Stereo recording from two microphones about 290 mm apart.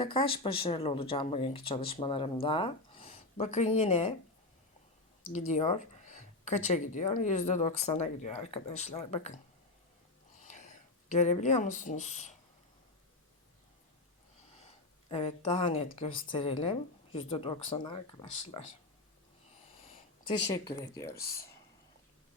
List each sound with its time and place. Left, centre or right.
0.0 s speech: centre
5.5 s speech: left
10.4 s speech: left
15.1 s speech: centre
20.5 s speech: centre